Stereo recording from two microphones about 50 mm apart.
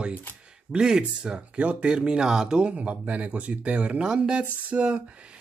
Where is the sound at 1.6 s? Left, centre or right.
Right.